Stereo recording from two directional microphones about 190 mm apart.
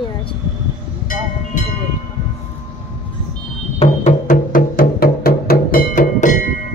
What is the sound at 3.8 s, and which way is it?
Music, 35° left (ahead or behind).